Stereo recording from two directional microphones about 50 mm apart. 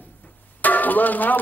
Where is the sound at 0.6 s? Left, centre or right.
Left.